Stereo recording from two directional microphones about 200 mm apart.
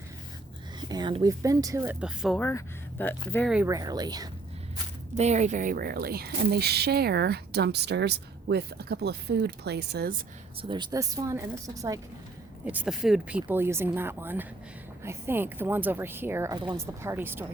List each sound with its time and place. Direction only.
0.8 s speech: 20° right (ahead or behind); by 2.4 s 5° right (ahead or behind)
2.4 s speech: 10° left (ahead or behind)
3.7 s speech: 20° right (ahead or behind)
5.1 s speech: 35° right (ahead or behind); by 10.2 s 55° right (ahead or behind)
10.6 s speech: 25° right (ahead or behind)
12.6 s speech: 5° right (ahead or behind)